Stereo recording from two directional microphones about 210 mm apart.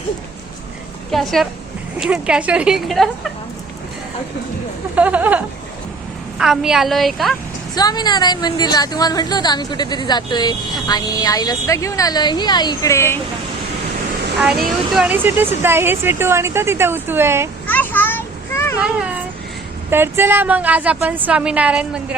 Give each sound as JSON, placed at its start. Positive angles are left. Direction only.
{"t": 1.1, "sound": "a woman's voice", "side_deg": 0}
{"t": 4.9, "sound": "speech", "side_deg": -5}
{"t": 6.4, "sound": "a woman's voice", "side_deg": 0}
{"t": 7.8, "sound": "a woman's voice", "side_deg": 20}
{"t": 14.9, "sound": "speech", "side_deg": -5}
{"t": 17.7, "sound": "a sound", "side_deg": 10}
{"t": 18.8, "sound": "a woman's voice", "side_deg": -5}